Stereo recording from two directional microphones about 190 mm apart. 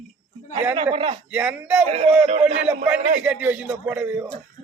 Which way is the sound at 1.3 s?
5° right (ahead or behind).